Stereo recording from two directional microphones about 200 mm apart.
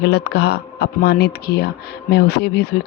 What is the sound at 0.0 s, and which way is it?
A man's voice, 55° left (ahead or behind).